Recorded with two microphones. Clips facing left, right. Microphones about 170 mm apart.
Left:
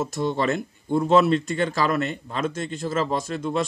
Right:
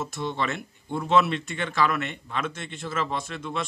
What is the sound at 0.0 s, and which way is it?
Speech, 40° left (ahead or behind).